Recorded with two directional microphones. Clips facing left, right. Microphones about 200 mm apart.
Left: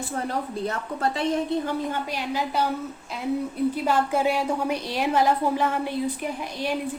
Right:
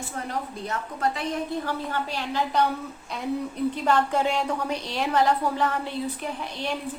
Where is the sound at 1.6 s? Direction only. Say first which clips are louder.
Left 2 dB; 15° left (ahead or behind).